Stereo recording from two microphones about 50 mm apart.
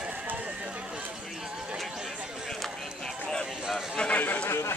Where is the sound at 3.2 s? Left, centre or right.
Centre.